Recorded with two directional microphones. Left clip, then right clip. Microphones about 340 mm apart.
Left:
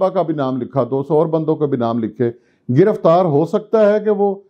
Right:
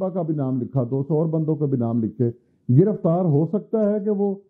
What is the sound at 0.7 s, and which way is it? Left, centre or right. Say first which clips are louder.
Speech: left 8 dB; centre.